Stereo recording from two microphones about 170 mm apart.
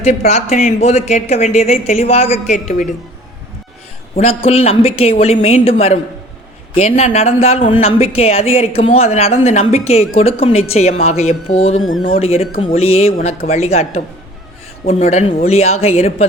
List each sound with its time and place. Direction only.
0.3 s speech: 40° left (ahead or behind)
4.1 s a man's voice: 35° left (ahead or behind)
13.1 s speech: 55° left (ahead or behind)
13.5 s speech: 40° left (ahead or behind)